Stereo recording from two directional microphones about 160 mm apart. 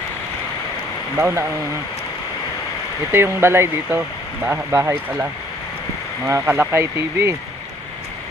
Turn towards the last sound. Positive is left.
turn(degrees=-15)  # may be behind; listen again after turning